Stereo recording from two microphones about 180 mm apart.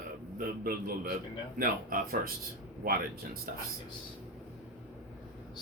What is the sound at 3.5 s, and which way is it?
Speech, 50° right (ahead or behind).